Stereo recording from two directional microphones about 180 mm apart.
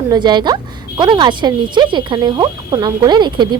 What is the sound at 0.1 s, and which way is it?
A woman's voice, 25° right (ahead or behind).